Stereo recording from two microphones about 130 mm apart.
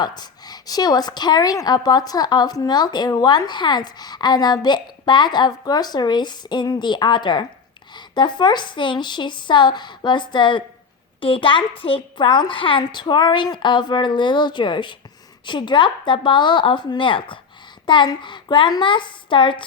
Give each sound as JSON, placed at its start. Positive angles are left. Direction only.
{"t": 0.0, "sound": "a woman's voice", "side_deg": 35}